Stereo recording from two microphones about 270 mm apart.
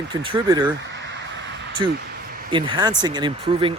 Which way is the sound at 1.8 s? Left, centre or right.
Centre.